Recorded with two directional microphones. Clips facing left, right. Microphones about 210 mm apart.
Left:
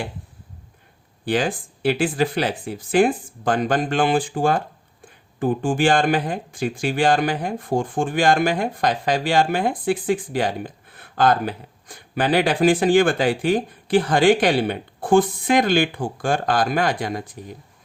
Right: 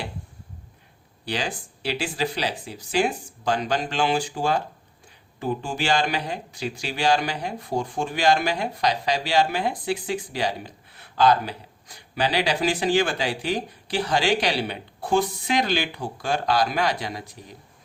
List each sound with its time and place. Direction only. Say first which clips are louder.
1.2 s speech: left 7 dB; 50° left (ahead or behind)